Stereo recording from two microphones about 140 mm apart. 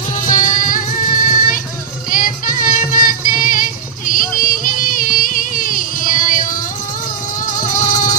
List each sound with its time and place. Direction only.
0.1 s music: 70° left (ahead or behind)